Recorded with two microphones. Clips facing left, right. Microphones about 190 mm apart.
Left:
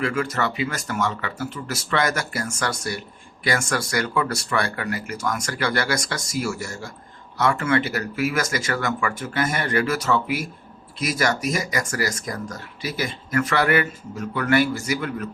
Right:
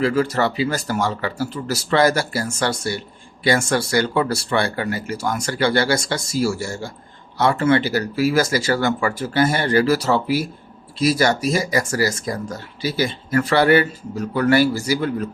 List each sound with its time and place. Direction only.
0.0 s speech: 30° right (ahead or behind)